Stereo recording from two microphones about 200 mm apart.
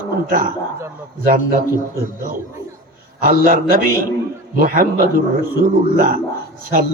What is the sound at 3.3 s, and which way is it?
Speech, 40° right (ahead or behind).